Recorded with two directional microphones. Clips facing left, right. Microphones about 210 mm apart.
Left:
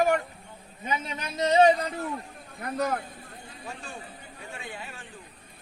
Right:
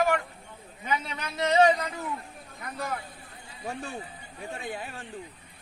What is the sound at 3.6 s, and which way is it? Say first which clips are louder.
Speech: right 6 dB; 60° right (ahead or behind).